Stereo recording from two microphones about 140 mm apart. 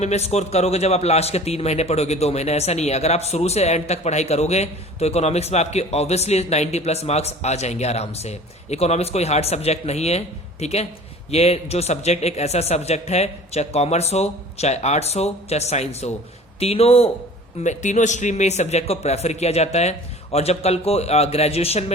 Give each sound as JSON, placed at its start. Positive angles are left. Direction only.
{"t": 0.0, "sound": "a man's voice", "side_deg": 50}
{"t": 17.6, "sound": "a man's voice", "side_deg": 60}